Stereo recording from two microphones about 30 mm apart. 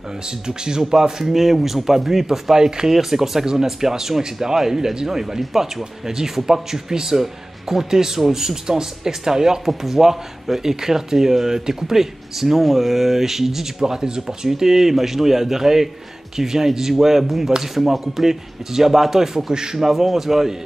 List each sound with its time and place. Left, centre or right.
0.5 s speech: right
1.3 s speech: centre; by 19.8 s right
19.8 s speech: centre